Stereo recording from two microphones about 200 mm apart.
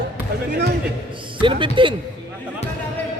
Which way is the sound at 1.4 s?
25° right (ahead or behind).